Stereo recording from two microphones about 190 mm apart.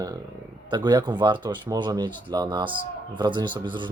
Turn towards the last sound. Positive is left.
turn(degrees=-25)  # may be behind; listen again after turning